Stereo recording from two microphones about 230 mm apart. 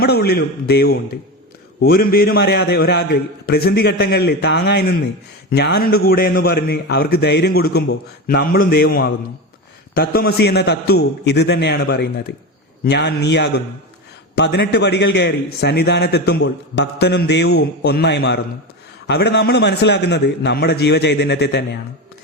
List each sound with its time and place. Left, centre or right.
0.0 s a man's voice: left